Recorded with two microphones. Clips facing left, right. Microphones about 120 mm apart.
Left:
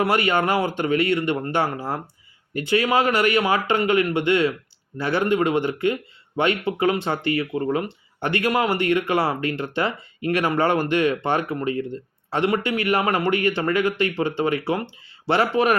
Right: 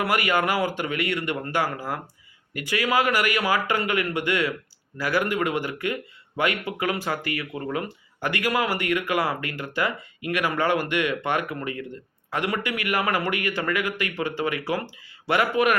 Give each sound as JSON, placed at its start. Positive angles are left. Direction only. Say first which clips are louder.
{"t": 0.0, "sound": "speech", "louder": "left 3 dB", "side_deg": 25}